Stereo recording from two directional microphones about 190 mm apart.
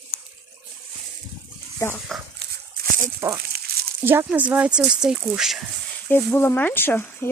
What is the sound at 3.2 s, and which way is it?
Speech, 15° right (ahead or behind).